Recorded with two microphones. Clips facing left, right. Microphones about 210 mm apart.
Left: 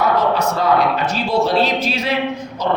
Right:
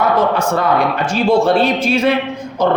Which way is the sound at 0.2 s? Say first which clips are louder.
Right 2 dB; 50° right (ahead or behind).